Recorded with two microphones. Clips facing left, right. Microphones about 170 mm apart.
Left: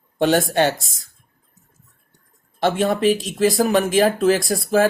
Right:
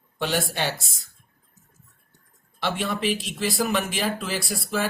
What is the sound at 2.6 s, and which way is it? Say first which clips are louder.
Speech: left 9 dB; 45° left (ahead or behind).